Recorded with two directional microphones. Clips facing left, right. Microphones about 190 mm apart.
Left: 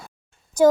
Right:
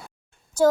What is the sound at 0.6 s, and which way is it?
Speech, 15° left (ahead or behind).